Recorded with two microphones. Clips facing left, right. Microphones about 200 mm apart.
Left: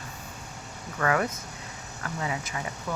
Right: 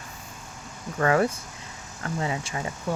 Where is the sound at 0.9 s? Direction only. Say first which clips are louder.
Right 4 dB; 30° right (ahead or behind).